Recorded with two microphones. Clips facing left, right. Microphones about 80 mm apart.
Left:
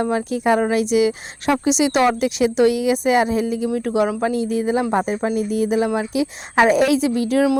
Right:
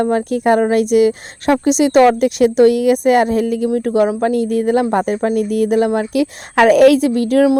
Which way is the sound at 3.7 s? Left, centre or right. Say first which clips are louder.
Right 5 dB; right.